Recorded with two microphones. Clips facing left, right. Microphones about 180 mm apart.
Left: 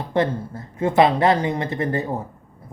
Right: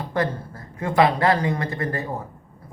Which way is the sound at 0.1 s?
25° left (ahead or behind).